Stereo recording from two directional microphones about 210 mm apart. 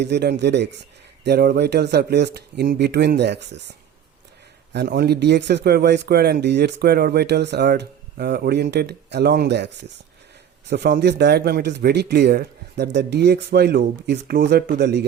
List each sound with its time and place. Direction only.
0.0 s speech: 55° right (ahead or behind)